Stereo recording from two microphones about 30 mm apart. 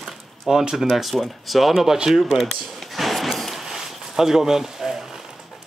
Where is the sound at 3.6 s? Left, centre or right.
Centre.